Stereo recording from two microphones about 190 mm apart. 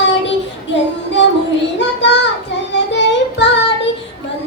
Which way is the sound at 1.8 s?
65° left (ahead or behind).